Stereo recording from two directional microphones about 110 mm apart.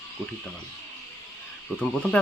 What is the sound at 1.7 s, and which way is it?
Speech, 15° left (ahead or behind).